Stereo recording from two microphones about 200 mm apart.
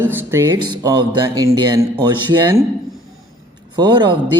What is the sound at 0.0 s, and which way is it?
A man's voice, 10° right (ahead or behind).